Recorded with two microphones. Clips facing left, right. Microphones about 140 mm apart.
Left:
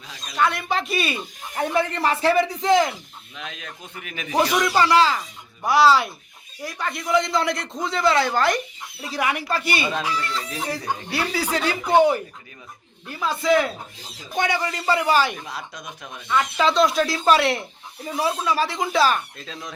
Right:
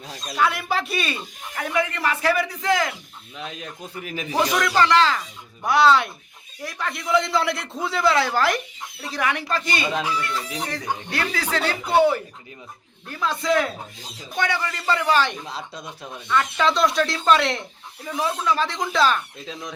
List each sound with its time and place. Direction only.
0.3 s a man's voice: 5° right (ahead or behind)
1.5 s speech: 30° left (ahead or behind)
3.3 s a man's voice: 35° right (ahead or behind)
4.4 s a man's voice: 15° left (ahead or behind); by 9.0 s centre (ahead or behind)
9.1 s speech: 10° left (ahead or behind)
9.9 s speech: 10° right (ahead or behind)
10.6 s speech: 10° left (ahead or behind)
13.1 s a man's voice: 5° left (ahead or behind)
14.3 s speech: 15° left (ahead or behind)
15.4 s speech: 25° right (ahead or behind)
16.3 s a man's voice: 5° left (ahead or behind)
19.4 s speech: 15° right (ahead or behind)